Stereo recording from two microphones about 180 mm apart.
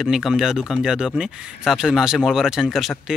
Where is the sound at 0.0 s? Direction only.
Centre (ahead or behind).